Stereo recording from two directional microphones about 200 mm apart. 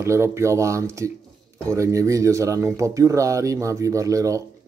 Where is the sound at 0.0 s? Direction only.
15° right (ahead or behind).